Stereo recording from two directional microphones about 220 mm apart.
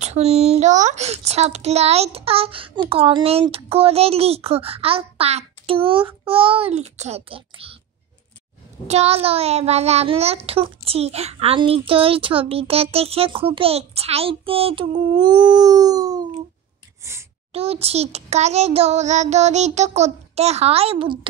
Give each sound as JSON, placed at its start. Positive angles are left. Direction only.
{"t": 0.0, "sound": "a child's voice", "side_deg": -30}
{"t": 8.8, "sound": "a child's voice", "side_deg": -30}
{"t": 17.5, "sound": "a child's voice", "side_deg": -25}